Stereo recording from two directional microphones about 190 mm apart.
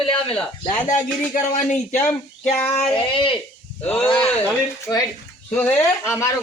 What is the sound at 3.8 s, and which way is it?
Speech, 10° left (ahead or behind).